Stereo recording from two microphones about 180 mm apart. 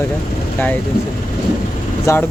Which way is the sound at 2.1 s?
15° left (ahead or behind).